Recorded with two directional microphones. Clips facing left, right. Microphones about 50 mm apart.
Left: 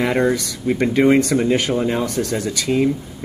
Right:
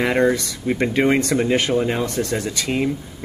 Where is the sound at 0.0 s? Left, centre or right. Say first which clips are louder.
Even; centre.